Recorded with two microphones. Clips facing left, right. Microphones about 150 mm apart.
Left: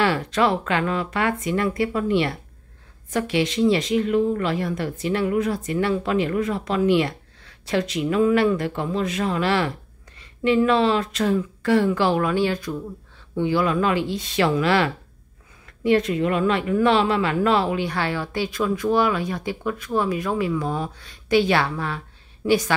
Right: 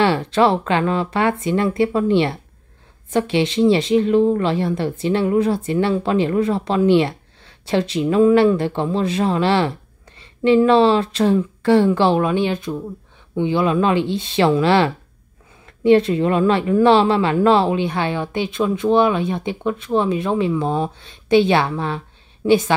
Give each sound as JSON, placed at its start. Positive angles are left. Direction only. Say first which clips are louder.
{"t": 0.0, "sound": "speech", "louder": "right 5 dB", "side_deg": -25}